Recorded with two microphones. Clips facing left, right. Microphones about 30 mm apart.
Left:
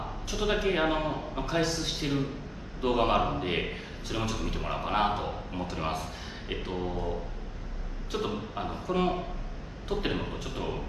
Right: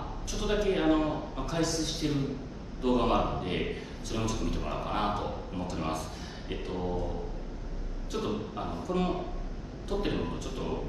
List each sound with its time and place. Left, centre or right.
0.3 s a man's voice: left